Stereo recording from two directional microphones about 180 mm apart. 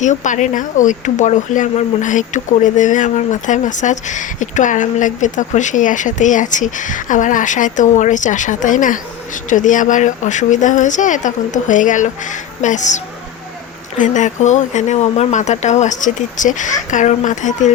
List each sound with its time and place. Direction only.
0.0 s speech: 40° left (ahead or behind)
14.0 s speech: 45° left (ahead or behind)